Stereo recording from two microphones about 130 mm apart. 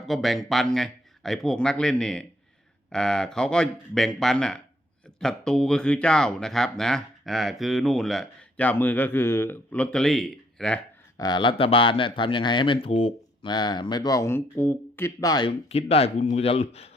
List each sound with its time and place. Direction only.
0.0 s speech: centre (ahead or behind)
11.2 s speech: 35° left (ahead or behind)
15.4 s speech: 50° left (ahead or behind)